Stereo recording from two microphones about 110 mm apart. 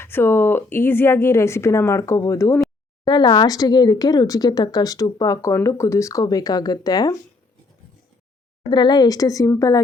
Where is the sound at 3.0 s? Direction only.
40° left (ahead or behind).